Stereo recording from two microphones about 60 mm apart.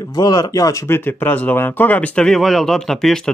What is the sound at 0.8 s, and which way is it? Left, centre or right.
Speech, left.